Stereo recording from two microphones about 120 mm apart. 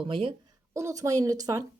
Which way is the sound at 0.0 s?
45° right (ahead or behind).